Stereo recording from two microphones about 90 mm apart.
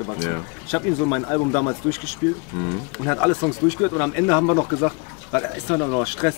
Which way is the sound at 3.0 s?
25° left (ahead or behind).